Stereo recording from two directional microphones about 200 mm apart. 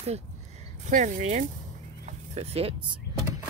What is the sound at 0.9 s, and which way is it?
Speech, 40° right (ahead or behind).